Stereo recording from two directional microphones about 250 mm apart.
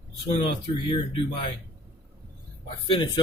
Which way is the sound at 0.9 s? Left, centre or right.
Left.